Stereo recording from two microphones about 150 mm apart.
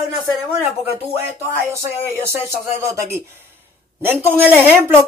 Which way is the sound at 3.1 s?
15° right (ahead or behind).